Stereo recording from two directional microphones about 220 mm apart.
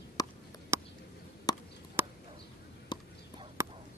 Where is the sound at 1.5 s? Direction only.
15° left (ahead or behind).